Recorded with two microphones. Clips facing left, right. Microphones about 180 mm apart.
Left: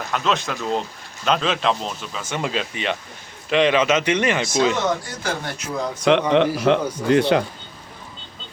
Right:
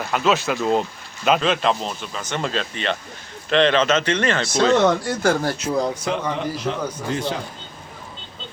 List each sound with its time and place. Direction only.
0.1 s speech: 5° right (ahead or behind); by 4.7 s 15° left (ahead or behind)
4.8 s speech: 55° right (ahead or behind)
5.4 s speech: 35° right (ahead or behind)
6.1 s speech: 80° left
7.1 s speech: 70° left (ahead or behind)